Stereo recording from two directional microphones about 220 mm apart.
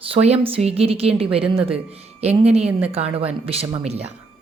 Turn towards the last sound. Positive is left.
turn(degrees=-30)  # may be behind; listen again after turning